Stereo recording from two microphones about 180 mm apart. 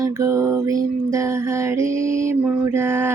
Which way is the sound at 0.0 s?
20° right (ahead or behind).